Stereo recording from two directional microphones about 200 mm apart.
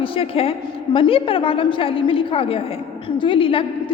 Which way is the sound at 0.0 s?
25° left (ahead or behind).